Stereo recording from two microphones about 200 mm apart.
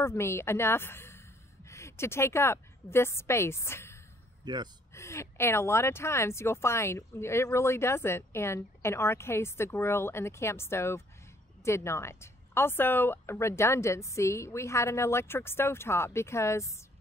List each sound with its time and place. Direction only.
0.0 s a woman's voice: 15° left (ahead or behind)
4.4 s speech: 20° right (ahead or behind)
4.9 s speech: 15° left (ahead or behind)